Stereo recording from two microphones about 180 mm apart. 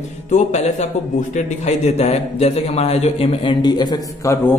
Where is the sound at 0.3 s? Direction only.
40° left (ahead or behind).